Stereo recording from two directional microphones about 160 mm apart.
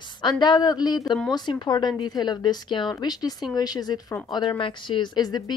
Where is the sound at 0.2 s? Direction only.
25° left (ahead or behind).